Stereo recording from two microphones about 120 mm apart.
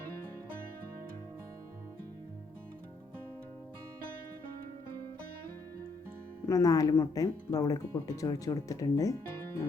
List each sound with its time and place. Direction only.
6.4 s speech: 30° left (ahead or behind)